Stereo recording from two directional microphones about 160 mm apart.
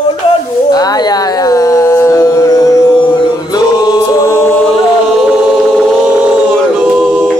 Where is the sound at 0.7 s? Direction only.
25° left (ahead or behind).